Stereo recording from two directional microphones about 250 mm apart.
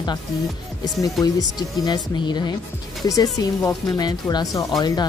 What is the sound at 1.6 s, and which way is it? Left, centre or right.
Speech, centre.